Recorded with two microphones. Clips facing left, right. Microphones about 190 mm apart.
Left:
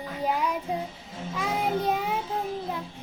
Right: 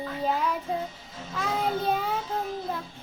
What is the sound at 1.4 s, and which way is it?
Child singing, 15° left (ahead or behind).